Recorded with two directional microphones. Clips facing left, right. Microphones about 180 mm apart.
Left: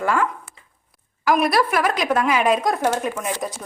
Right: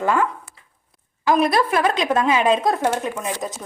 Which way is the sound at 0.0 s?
20° right (ahead or behind).